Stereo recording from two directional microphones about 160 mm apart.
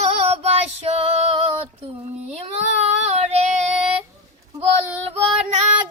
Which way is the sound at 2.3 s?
40° right (ahead or behind).